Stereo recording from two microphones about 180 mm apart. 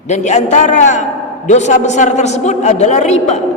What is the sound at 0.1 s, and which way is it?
A man's voice, 40° left (ahead or behind).